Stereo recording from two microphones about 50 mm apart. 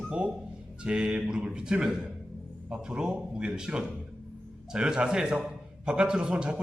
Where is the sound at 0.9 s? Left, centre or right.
Right.